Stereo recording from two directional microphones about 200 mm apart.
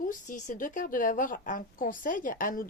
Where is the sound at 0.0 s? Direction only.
40° left (ahead or behind).